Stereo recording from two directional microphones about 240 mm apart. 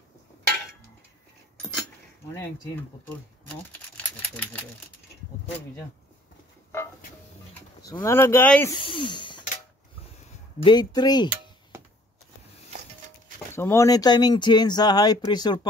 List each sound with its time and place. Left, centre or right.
7.8 s speech: centre
8.7 s speech: left
10.6 s speech: centre
13.5 s speech: centre